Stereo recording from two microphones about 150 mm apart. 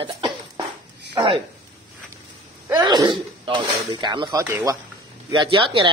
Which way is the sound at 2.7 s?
25° right (ahead or behind).